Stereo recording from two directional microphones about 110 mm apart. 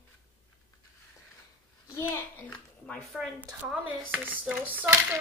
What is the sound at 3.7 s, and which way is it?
Speech, 10° right (ahead or behind).